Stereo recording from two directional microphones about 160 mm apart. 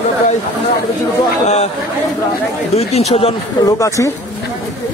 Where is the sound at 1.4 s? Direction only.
45° left (ahead or behind).